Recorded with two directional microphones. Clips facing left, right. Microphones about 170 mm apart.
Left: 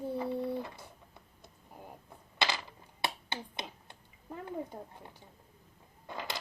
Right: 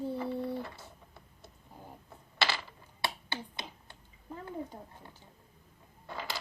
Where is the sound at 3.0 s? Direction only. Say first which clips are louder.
Even; 20° left (ahead or behind).